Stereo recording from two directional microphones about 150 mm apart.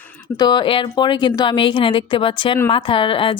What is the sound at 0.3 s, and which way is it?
A woman's voice, 30° left (ahead or behind).